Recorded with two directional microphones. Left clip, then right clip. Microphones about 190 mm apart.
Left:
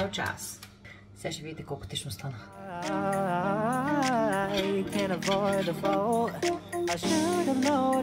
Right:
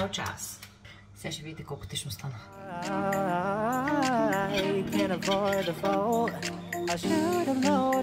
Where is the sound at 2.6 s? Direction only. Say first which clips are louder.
Even; centre (ahead or behind).